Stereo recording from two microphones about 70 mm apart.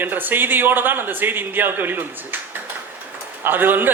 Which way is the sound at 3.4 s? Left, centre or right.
Right.